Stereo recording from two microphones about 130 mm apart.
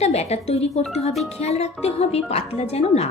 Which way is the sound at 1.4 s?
55° left (ahead or behind).